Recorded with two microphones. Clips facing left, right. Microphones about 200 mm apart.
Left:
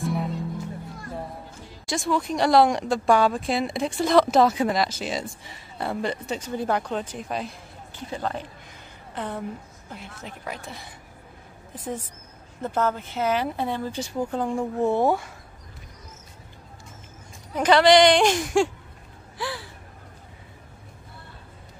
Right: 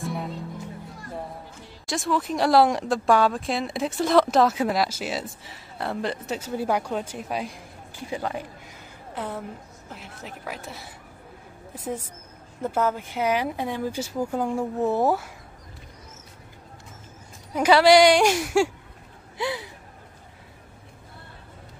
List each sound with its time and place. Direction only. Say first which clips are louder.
0.0 s music: left 3 dB; centre (ahead or behind)
1.9 s a woman's voice: left 1 dB; centre (ahead or behind)
17.6 s speech: right 1 dB; 10° right (ahead or behind)
19.3 s a sound: right 4 dB; 20° right (ahead or behind)